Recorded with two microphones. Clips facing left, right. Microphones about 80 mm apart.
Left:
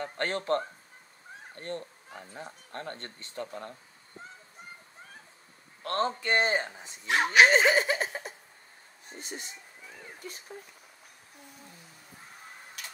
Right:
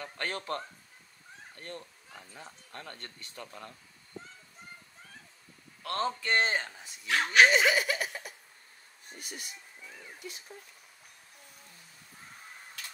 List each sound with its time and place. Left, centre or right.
0.0 s speech: left
5.8 s a man's voice: left
6.2 s speech: left
7.4 s a sound: left
9.1 s speech: left
10.2 s speech: left